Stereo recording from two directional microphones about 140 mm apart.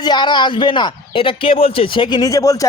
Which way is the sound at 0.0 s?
30° left (ahead or behind).